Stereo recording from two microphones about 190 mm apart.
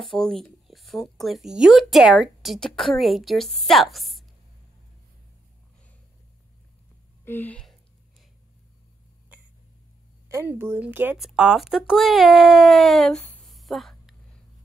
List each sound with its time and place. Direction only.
0.0 s speech: centre (ahead or behind)
7.2 s speech: 10° left (ahead or behind)
10.2 s speech: 15° right (ahead or behind); by 13.3 s 5° left (ahead or behind)
13.5 s music: centre (ahead or behind)